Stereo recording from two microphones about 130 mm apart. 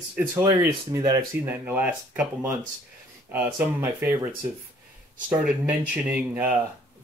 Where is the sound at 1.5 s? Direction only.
15° right (ahead or behind).